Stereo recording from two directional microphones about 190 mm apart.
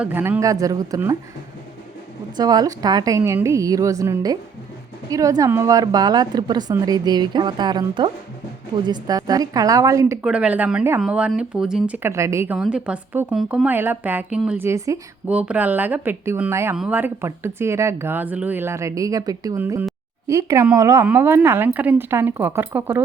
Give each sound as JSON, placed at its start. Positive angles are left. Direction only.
{"t": 0.0, "sound": "speech", "side_deg": -10}
{"t": 2.3, "sound": "a woman's voice", "side_deg": -20}
{"t": 10.2, "sound": "speech", "side_deg": -5}